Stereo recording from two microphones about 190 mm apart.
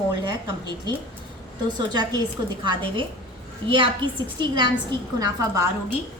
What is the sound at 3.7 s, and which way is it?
A woman's voice, 25° right (ahead or behind).